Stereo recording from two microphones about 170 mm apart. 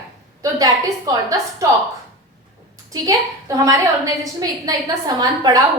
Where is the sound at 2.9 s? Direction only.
20° right (ahead or behind).